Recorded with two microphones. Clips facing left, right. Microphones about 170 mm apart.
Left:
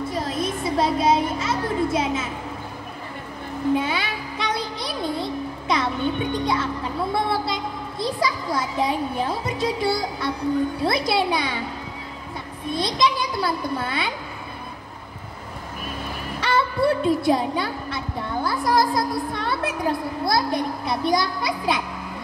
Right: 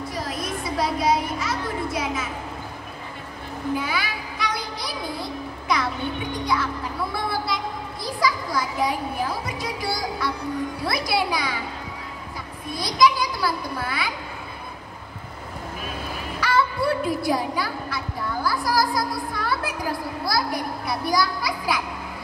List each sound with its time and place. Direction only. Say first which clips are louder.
0.1 s a sound: left 4 dB; 25° left (ahead or behind)
3.7 s music: left 2 dB; 25° left (ahead or behind)
10.8 s a child's voice: left 3 dB; 25° left (ahead or behind)
12.7 s a child's voice: right 2 dB; 25° left (ahead or behind)
16.3 s a woman's voice: left 1 dB; 25° left (ahead or behind)